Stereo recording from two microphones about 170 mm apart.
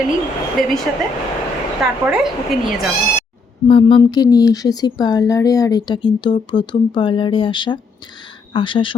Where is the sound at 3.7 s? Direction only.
30° left (ahead or behind).